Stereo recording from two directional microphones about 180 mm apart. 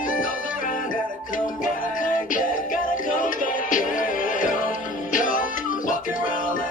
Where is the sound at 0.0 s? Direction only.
50° left (ahead or behind).